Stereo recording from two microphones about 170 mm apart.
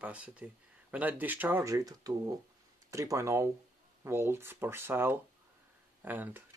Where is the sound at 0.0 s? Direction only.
10° right (ahead or behind).